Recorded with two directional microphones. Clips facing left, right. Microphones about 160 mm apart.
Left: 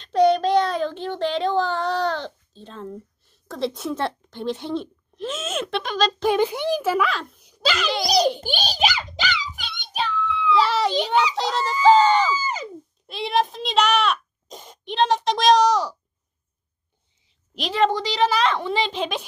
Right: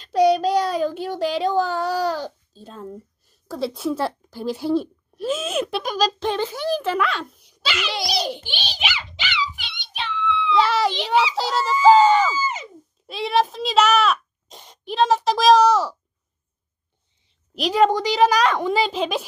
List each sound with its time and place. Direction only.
0.0 s child singing: 5° right (ahead or behind)
3.4 s speech: 5° right (ahead or behind)
6.2 s a child's voice: 15° left (ahead or behind)
6.8 s a child's voice: 5° left (ahead or behind)
7.4 s a sound: 40° left (ahead or behind)
10.5 s a child's voice: centre (ahead or behind)
12.4 s a sound: 35° left (ahead or behind)
13.0 s a child's voice: centre (ahead or behind)
14.5 s a child's voice: 45° left (ahead or behind)
14.9 s a child's voice: 5° right (ahead or behind)
17.7 s a woman's voice: 10° right (ahead or behind)